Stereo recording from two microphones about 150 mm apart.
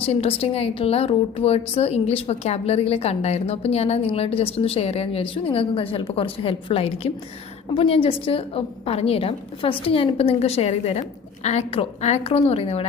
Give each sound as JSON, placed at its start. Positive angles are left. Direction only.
{"t": 0.0, "sound": "a woman's voice", "side_deg": 40}